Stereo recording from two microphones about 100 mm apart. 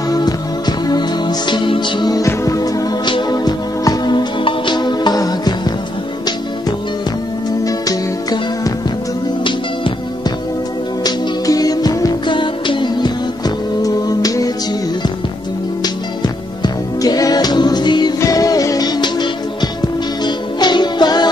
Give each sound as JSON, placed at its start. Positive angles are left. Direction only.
{"t": 0.1, "sound": "music", "side_deg": 40}
{"t": 3.1, "sound": "music", "side_deg": 45}
{"t": 7.6, "sound": "music", "side_deg": 40}
{"t": 9.4, "sound": "music", "side_deg": 55}
{"t": 11.1, "sound": "music", "side_deg": 40}
{"t": 12.3, "sound": "music", "side_deg": 55}
{"t": 13.8, "sound": "music", "side_deg": 35}
{"t": 16.6, "sound": "music", "side_deg": 40}